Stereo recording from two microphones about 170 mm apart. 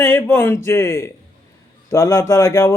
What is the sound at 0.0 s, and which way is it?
A man's voice, 15° left (ahead or behind).